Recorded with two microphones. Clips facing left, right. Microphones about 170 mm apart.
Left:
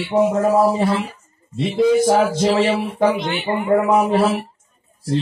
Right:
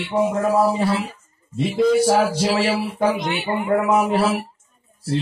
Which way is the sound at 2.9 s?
25° left (ahead or behind).